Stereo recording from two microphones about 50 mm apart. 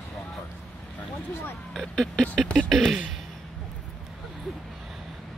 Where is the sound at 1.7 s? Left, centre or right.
Centre.